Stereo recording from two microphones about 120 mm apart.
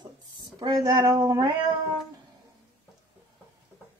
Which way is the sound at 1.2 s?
40° right (ahead or behind).